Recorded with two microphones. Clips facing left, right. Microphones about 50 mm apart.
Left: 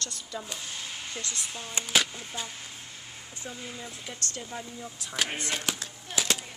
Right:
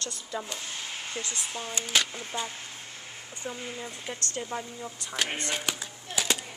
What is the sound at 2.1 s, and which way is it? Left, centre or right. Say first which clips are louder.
Speech: right 4 dB; centre.